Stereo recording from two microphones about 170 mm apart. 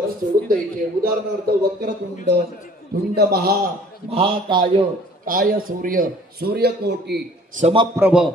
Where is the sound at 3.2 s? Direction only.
65° right (ahead or behind).